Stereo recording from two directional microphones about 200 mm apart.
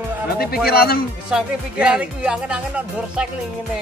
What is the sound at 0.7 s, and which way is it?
Speech, 50° left (ahead or behind).